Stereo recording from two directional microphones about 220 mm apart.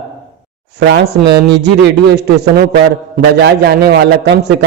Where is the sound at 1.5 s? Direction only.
50° right (ahead or behind).